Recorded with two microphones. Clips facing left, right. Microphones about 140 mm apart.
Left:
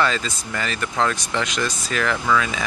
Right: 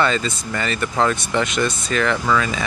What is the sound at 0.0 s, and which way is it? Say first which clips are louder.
Speech: right 2 dB; centre (ahead or behind).